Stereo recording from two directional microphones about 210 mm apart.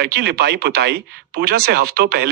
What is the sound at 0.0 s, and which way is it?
Speech, 50° right (ahead or behind).